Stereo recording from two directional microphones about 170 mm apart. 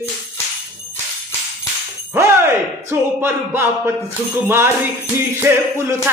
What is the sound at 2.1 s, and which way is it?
Speech, 15° right (ahead or behind).